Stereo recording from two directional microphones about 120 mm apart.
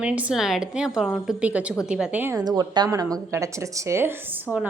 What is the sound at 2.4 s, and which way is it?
Speech, 35° right (ahead or behind).